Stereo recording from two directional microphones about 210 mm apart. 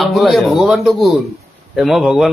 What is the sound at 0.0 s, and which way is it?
Speech, centre (ahead or behind).